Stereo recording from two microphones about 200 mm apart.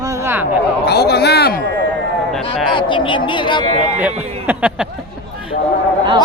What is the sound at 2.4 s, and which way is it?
Speech, 25° left (ahead or behind).